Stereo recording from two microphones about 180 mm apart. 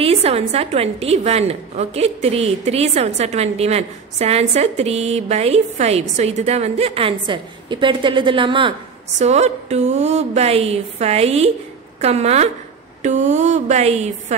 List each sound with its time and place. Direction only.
0.0 s a woman's voice: 35° right (ahead or behind)
9.2 s a woman's voice: 40° right (ahead or behind)